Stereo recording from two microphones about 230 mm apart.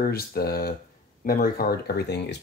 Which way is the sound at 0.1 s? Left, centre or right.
Left.